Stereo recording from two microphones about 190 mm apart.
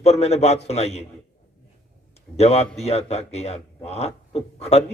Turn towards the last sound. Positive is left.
turn(degrees=35)  # may be behind; listen again after turning